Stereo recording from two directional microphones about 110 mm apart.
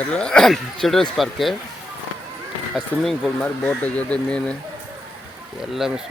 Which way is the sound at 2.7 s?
Centre (ahead or behind).